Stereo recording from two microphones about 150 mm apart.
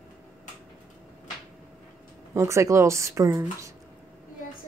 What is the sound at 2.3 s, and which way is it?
Speech, 20° right (ahead or behind).